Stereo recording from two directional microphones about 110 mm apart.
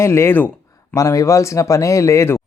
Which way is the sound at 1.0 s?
30° left (ahead or behind).